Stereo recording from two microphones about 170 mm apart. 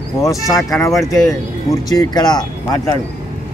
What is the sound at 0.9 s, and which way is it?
Speech, centre (ahead or behind).